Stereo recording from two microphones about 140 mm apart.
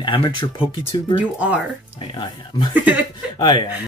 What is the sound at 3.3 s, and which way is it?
Speech, 35° left (ahead or behind).